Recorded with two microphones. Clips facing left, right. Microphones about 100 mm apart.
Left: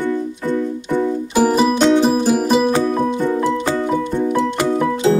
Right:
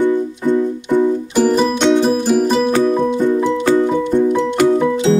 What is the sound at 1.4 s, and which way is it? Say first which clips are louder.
Music: even; 5° left (ahead or behind).